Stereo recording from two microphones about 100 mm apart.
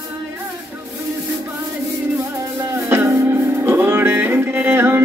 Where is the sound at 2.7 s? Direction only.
30° right (ahead or behind).